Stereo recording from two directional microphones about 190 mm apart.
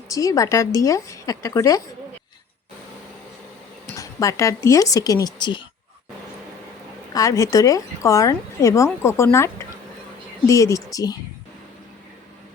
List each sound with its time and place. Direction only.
0.1 s a woman's voice: 15° left (ahead or behind)
3.9 s speech: 15° left (ahead or behind)
7.1 s a woman's voice: 15° left (ahead or behind)